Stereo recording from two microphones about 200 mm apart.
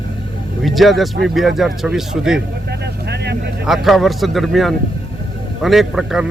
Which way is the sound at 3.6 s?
Centre (ahead or behind).